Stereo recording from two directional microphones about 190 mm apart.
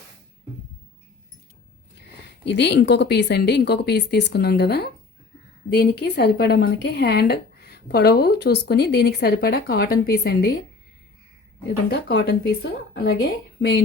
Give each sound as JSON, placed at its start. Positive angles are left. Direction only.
{"t": 2.4, "sound": "speech", "side_deg": 65}
{"t": 11.9, "sound": "speech", "side_deg": 55}